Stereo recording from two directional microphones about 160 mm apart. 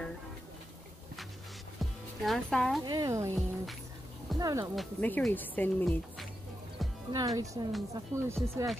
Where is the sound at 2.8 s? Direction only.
20° right (ahead or behind).